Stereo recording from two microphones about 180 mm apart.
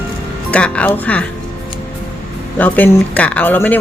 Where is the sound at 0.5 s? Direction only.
5° left (ahead or behind).